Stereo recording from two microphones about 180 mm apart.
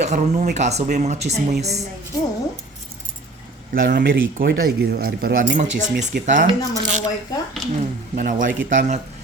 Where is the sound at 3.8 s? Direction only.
55° right (ahead or behind).